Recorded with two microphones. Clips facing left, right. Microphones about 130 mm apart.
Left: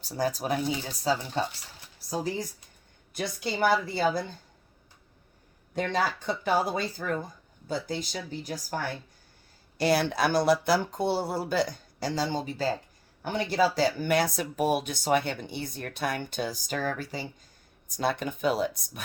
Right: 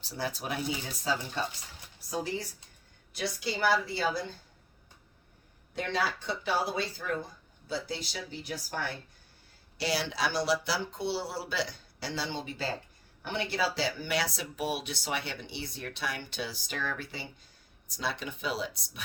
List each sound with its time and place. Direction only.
0.0 s speech: 40° left (ahead or behind)
2.0 s speech: 35° left (ahead or behind)
3.1 s speech: 50° left (ahead or behind)
5.7 s speech: 45° left (ahead or behind)
17.8 s speech: 50° left (ahead or behind)